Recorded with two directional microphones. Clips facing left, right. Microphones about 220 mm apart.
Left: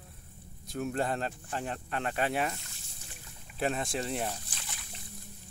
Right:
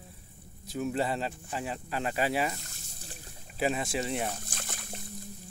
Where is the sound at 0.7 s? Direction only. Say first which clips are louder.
Right 1 dB; centre (ahead or behind).